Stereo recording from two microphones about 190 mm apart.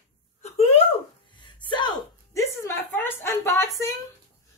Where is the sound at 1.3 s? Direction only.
25° left (ahead or behind).